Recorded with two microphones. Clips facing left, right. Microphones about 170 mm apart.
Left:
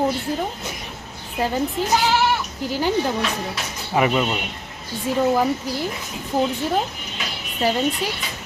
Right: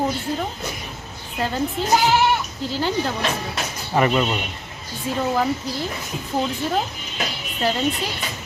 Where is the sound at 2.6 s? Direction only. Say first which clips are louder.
Left 2 dB; 15° left (ahead or behind).